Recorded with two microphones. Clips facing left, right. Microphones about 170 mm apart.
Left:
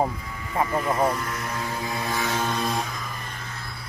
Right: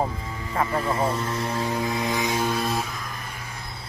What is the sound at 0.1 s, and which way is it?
Music, 25° right (ahead or behind).